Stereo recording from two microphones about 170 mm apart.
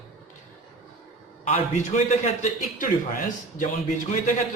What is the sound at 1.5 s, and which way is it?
A man's voice, 45° left (ahead or behind).